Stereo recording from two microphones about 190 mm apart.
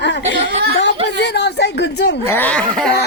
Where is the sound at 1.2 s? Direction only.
65° left (ahead or behind).